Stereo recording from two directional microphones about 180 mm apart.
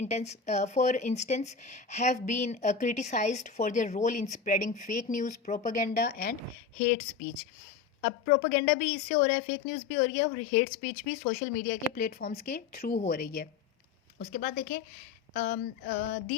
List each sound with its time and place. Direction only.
0.0 s speech: 35° left (ahead or behind); by 6.3 s 65° left (ahead or behind)
8.0 s a woman's voice: 60° left (ahead or behind)